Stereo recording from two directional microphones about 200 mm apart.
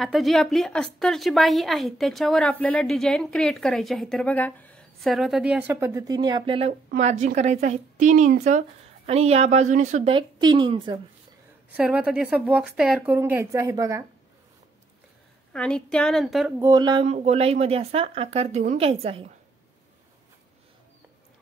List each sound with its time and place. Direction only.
0.0 s a woman's voice: centre (ahead or behind); by 6.7 s 25° right (ahead or behind)
7.0 s speech: 35° right (ahead or behind)
11.7 s speech: 5° right (ahead or behind)
15.5 s a woman's voice: 5° left (ahead or behind)
16.5 s speech: 20° right (ahead or behind)
17.0 s speech: 35° right (ahead or behind)